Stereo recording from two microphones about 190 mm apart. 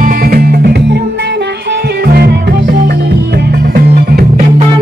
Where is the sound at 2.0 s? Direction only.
55° right (ahead or behind).